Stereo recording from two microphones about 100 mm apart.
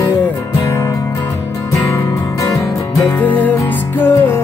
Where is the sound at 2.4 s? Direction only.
30° left (ahead or behind).